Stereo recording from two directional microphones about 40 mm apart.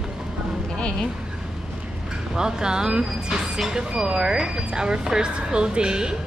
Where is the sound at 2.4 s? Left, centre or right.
Centre.